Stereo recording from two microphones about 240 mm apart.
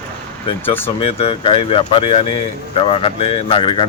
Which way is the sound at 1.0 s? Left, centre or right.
Left.